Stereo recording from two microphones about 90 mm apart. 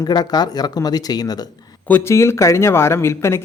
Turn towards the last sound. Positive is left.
turn(degrees=30)  # may be behind; listen again after turning